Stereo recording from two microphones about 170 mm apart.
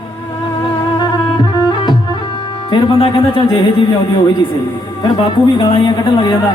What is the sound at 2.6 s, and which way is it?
A man's voice, 30° left (ahead or behind).